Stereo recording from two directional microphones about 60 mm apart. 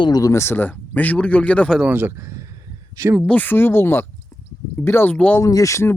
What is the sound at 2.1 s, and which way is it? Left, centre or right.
Speech, right.